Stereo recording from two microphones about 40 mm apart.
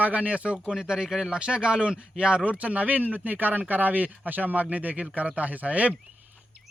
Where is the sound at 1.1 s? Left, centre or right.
Centre.